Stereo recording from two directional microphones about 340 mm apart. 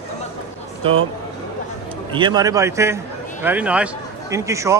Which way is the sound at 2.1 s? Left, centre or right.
Centre.